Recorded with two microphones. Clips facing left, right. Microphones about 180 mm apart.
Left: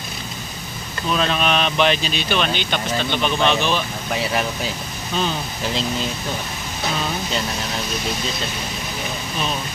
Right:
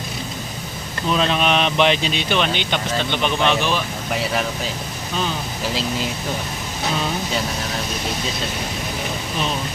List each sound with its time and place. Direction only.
1.1 s speech: 20° right (ahead or behind); by 4.5 s centre (ahead or behind)